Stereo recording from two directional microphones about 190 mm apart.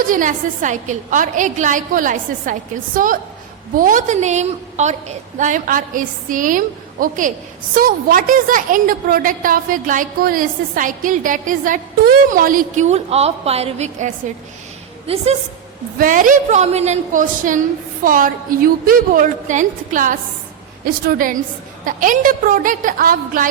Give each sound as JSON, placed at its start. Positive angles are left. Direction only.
{"t": 0.1, "sound": "a woman's voice", "side_deg": -40}
{"t": 16.0, "sound": "a woman's voice", "side_deg": -45}